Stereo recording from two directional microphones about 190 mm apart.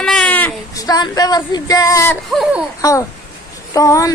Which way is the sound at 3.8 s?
15° left (ahead or behind).